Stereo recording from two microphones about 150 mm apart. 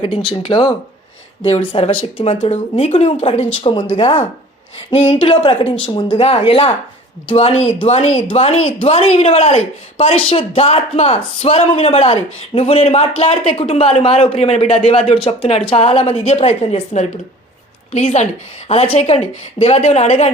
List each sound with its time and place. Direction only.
0.4 s speech: 30° left (ahead or behind)
1.5 s speech: 45° left (ahead or behind)